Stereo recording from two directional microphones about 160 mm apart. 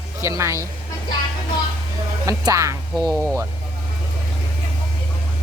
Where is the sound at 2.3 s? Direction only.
20° right (ahead or behind).